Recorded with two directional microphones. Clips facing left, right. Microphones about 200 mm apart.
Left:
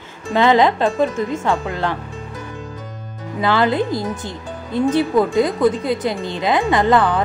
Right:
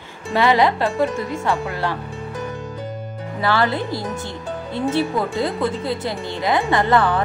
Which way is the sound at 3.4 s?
20° left (ahead or behind).